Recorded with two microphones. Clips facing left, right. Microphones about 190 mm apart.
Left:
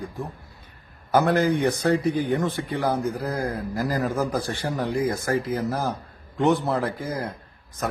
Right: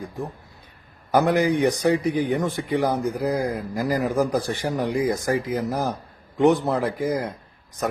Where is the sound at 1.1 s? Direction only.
15° right (ahead or behind).